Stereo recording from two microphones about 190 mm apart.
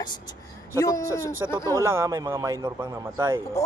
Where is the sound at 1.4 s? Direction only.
15° right (ahead or behind).